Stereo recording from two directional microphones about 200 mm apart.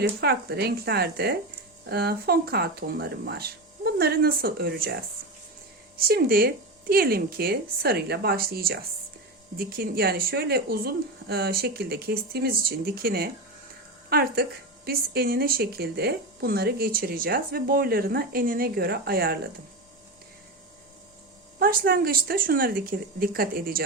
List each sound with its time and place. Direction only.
0.0 s speech: 55° right (ahead or behind)
6.0 s speech: 50° right (ahead or behind)
21.6 s speech: 50° right (ahead or behind)